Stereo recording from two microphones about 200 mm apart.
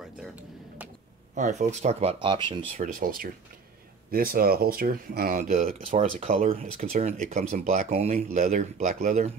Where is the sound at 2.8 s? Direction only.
45° right (ahead or behind).